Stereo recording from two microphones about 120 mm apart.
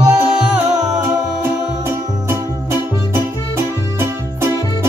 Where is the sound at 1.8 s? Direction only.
20° right (ahead or behind).